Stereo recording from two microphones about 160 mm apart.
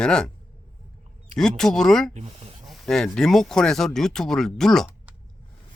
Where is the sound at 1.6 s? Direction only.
Centre (ahead or behind).